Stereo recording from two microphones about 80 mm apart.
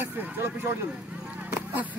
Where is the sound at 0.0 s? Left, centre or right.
Right.